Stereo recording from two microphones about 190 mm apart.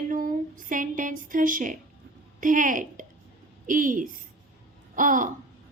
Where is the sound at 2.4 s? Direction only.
45° right (ahead or behind).